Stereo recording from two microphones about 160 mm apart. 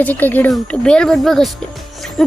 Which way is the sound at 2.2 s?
5° left (ahead or behind).